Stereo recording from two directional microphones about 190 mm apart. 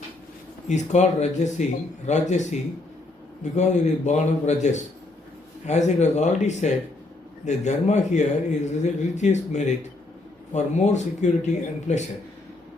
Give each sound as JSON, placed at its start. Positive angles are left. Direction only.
{"t": 0.7, "sound": "speech", "side_deg": 40}